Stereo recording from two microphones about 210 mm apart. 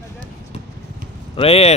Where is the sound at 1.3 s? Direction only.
30° left (ahead or behind).